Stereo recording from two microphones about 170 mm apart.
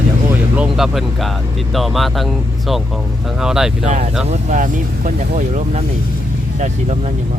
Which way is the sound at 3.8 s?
40° right (ahead or behind).